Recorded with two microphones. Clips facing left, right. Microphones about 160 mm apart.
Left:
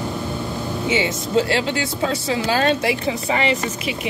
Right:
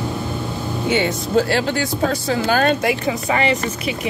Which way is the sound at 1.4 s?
25° left (ahead or behind).